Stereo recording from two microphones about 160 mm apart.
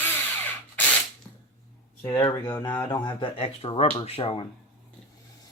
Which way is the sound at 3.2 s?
35° left (ahead or behind).